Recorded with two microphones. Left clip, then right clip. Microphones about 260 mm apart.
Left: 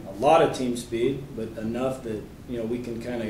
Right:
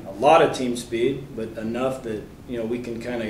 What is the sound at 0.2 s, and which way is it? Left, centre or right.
Speech, centre.